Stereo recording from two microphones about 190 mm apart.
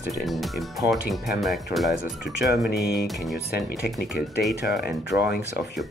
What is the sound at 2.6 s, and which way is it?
Speech, 55° left (ahead or behind).